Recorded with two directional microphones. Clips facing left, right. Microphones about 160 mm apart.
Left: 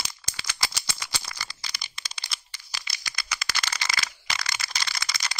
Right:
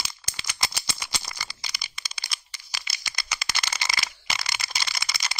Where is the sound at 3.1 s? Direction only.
25° right (ahead or behind).